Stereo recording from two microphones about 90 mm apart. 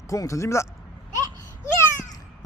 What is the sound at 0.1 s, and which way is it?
Speech, 35° left (ahead or behind).